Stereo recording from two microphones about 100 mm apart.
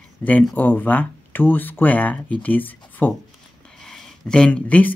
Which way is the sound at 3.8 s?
10° left (ahead or behind).